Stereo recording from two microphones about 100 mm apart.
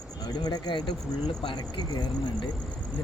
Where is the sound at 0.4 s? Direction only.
45° left (ahead or behind).